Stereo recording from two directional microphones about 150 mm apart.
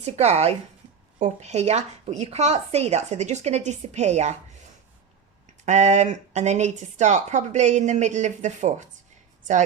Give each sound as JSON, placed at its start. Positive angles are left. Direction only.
{"t": 0.0, "sound": "speech", "side_deg": -45}
{"t": 5.6, "sound": "speech", "side_deg": -50}